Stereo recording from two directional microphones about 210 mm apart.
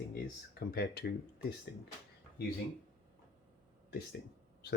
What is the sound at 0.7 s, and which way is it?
Speech, 45° left (ahead or behind).